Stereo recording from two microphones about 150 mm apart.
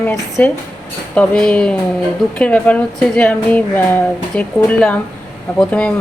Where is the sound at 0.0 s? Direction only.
15° left (ahead or behind).